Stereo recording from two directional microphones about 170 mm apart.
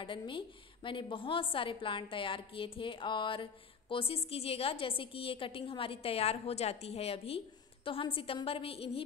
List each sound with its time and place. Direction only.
0.0 s a woman's voice: 30° left (ahead or behind)